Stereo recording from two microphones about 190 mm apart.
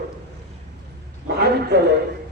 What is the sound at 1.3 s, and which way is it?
Speech, 60° right (ahead or behind).